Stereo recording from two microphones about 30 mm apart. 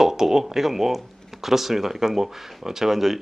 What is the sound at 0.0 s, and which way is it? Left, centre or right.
Speech, centre.